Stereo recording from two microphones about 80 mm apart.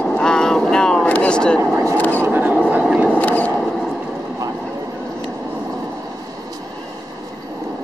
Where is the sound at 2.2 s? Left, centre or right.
Right.